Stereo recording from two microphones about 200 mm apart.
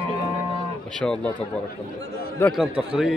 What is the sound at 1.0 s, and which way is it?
Speech, 5° left (ahead or behind).